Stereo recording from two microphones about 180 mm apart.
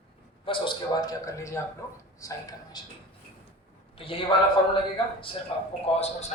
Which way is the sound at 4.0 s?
30° left (ahead or behind).